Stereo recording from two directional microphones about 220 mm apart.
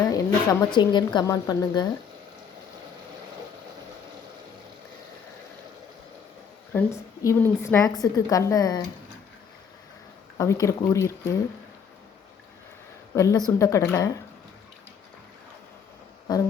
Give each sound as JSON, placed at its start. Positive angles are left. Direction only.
{"t": 0.1, "sound": "speech", "side_deg": 20}
{"t": 6.7, "sound": "a woman's voice", "side_deg": 15}
{"t": 10.3, "sound": "a woman's voice", "side_deg": 15}
{"t": 13.1, "sound": "a woman's voice", "side_deg": 15}